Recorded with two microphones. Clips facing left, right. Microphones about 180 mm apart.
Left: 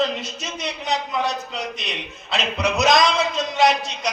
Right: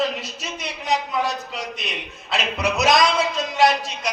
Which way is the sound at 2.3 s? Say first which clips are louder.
Left 1 dB; centre (ahead or behind).